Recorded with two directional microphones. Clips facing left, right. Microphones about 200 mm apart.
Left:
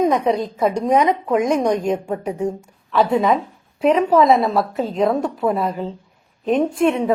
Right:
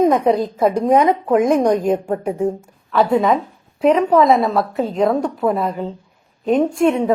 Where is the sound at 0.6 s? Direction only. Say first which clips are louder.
Right 2 dB; 50° right (ahead or behind).